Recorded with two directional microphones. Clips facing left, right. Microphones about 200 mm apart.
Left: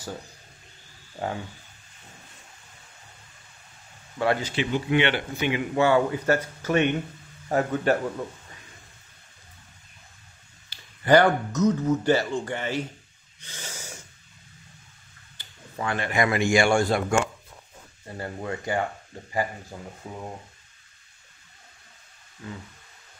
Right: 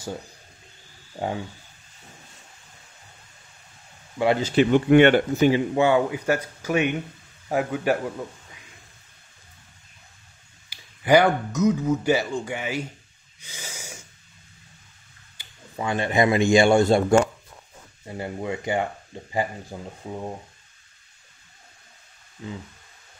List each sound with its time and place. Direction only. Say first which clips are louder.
1.2 s speech: right 2 dB; 15° right (ahead or behind)
4.2 s speech: right 3 dB; 20° right (ahead or behind)
4.6 s speech: right 9 dB; 55° right (ahead or behind); by 5.7 s 35° right (ahead or behind)
5.8 s speech: right 1 dB; 15° right (ahead or behind)
10.7 s speech: right 1 dB; 10° right (ahead or behind)
13.4 s snort: even; 10° right (ahead or behind)
15.3 s speech: right 2 dB; 15° right (ahead or behind)
18.0 s speech: right 3 dB; 15° right (ahead or behind)
22.4 s speech: right 3 dB; 20° right (ahead or behind)